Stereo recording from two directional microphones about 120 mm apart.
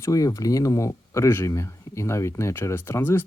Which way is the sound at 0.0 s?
30° left (ahead or behind).